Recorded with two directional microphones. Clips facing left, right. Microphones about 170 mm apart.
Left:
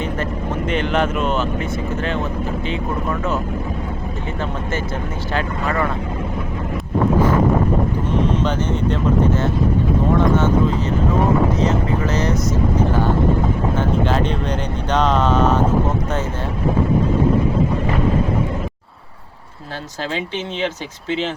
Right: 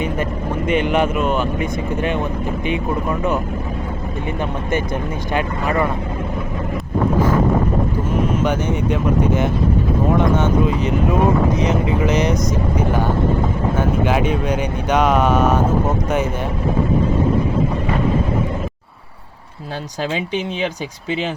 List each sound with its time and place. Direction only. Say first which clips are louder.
0.7 s speech: right 3 dB; 10° right (ahead or behind)
8.3 s speech: right 1 dB; 10° right (ahead or behind)
20.1 s speech: right 1 dB; 15° right (ahead or behind)